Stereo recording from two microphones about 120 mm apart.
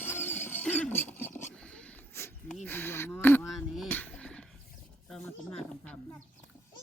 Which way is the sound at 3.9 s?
10° left (ahead or behind).